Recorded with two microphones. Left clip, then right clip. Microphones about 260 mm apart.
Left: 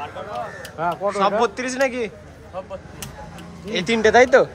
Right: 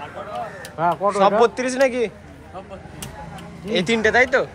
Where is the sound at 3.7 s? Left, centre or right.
Centre.